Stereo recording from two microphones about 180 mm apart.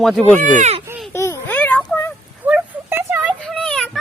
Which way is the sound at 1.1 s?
15° left (ahead or behind).